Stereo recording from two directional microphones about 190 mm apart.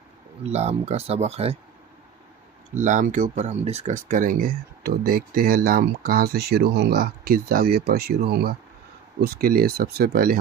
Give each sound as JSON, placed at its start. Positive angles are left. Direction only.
{"t": 0.4, "sound": "speech", "side_deg": -35}
{"t": 2.7, "sound": "speech", "side_deg": -40}